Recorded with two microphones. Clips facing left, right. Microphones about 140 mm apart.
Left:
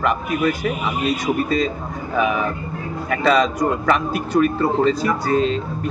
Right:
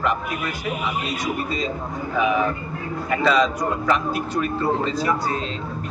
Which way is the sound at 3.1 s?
55° left (ahead or behind).